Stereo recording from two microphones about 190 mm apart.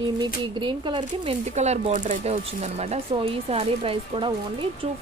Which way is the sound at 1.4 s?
35° right (ahead or behind).